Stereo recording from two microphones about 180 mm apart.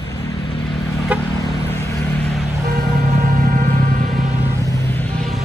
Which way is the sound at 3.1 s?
50° right (ahead or behind).